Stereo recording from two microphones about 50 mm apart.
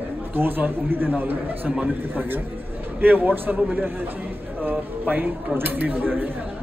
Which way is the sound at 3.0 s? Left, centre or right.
Right.